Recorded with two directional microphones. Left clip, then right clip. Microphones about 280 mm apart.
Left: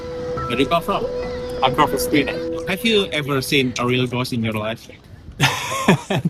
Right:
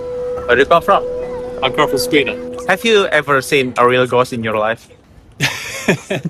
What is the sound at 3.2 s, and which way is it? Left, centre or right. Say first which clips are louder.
Speech: right 8 dB; right.